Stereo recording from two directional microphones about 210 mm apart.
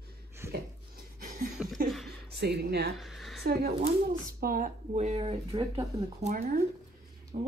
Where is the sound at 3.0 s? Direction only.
Centre (ahead or behind).